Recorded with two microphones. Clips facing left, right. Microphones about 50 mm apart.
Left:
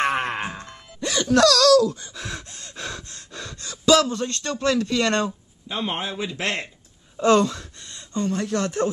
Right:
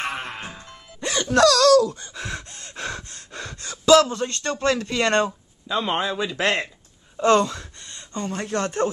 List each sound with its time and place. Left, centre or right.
0.0 s music: left
0.5 s music: centre
1.2 s a sound: centre
2.1 s gasp: centre
2.7 s gasp: right
4.0 s speech: right
5.8 s speech: right
7.2 s speech: centre
8.3 s speech: right